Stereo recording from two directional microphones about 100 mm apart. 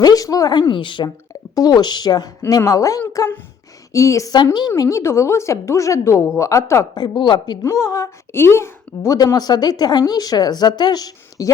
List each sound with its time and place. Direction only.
0.0 s speech: 40° left (ahead or behind)
0.7 s speech: 55° left (ahead or behind)
1.3 s a woman's voice: 40° left (ahead or behind)
7.2 s speech: 50° left (ahead or behind)
7.6 s speech: 35° left (ahead or behind)
9.1 s speech: 40° left (ahead or behind)